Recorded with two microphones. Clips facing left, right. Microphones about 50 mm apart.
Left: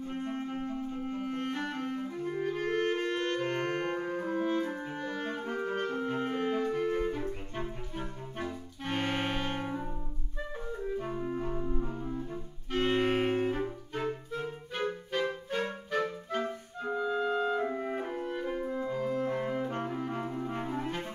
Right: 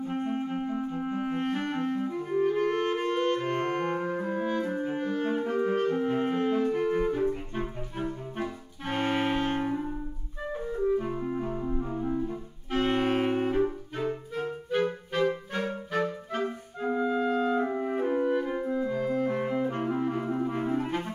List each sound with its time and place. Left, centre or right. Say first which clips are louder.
0.1 s clarinet: right 5 dB; centre
4.8 s music: right 7 dB; centre
11.0 s clarinet: right 4 dB; centre
11.9 s music: right 7 dB; right
12.7 s clarinet: right 2 dB; centre
15.1 s music: right 4 dB; centre
18.8 s organ: right 4 dB; centre
19.1 s music: right 4 dB; right
20.4 s clarinet: right 5 dB; centre